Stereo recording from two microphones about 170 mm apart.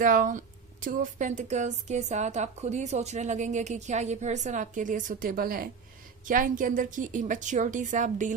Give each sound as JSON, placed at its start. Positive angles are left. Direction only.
{"t": 0.0, "sound": "speech", "side_deg": -50}